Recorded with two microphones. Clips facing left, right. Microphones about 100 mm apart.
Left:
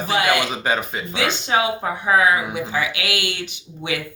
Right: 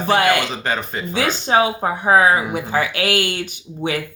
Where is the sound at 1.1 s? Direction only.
35° right (ahead or behind).